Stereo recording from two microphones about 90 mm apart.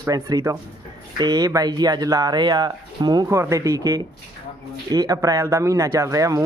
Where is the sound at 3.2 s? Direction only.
30° right (ahead or behind).